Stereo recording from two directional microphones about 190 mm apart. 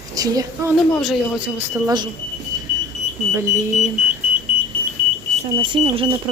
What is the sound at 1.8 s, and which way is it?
Speech, 25° right (ahead or behind).